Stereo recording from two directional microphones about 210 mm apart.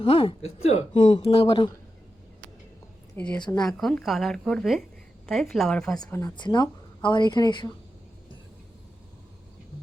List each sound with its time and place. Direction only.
0.0 s speech: 25° left (ahead or behind)
3.2 s speech: 5° left (ahead or behind)
6.0 s speech: 15° left (ahead or behind)